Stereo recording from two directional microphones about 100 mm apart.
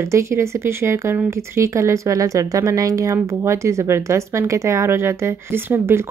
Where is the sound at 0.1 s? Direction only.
30° right (ahead or behind).